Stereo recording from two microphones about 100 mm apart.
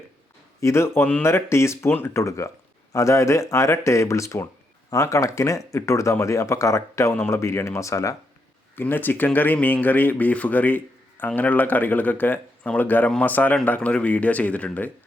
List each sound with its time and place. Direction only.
0.6 s speech: 25° left (ahead or behind)
8.7 s speech: 20° left (ahead or behind)